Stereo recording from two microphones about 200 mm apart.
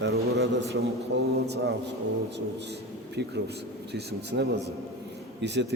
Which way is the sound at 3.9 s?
55° right (ahead or behind).